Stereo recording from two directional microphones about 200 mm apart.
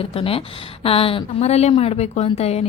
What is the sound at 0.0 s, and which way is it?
Speech, 30° left (ahead or behind).